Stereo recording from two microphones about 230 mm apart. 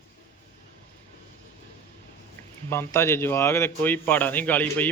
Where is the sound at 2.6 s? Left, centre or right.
Centre.